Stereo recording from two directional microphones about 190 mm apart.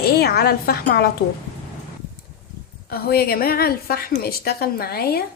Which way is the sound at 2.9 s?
55° left (ahead or behind).